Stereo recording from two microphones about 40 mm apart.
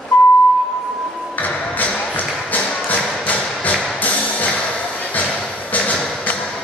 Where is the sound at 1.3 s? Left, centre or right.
Left.